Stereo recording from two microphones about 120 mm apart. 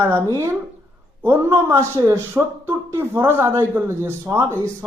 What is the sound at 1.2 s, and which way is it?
Speech, 20° right (ahead or behind).